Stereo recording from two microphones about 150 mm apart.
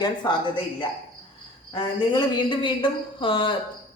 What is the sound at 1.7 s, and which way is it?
A woman's voice, 30° left (ahead or behind).